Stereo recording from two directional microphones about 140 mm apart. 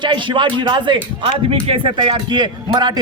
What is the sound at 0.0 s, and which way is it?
Speech, 35° right (ahead or behind).